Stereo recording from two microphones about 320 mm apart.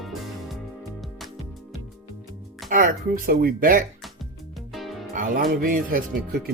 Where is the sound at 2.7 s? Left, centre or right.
Right.